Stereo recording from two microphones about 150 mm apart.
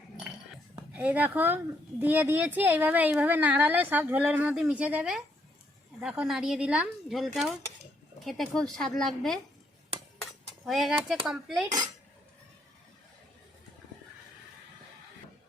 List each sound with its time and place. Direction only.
0.9 s a woman's voice: 10° right (ahead or behind)
10.7 s a woman's voice: centre (ahead or behind)